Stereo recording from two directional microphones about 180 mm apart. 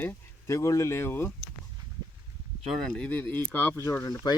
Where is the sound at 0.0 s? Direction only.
15° left (ahead or behind).